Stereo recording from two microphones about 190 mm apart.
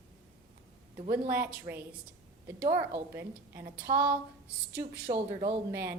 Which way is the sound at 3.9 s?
30° right (ahead or behind).